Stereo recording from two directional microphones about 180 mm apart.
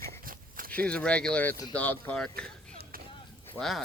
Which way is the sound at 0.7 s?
5° left (ahead or behind).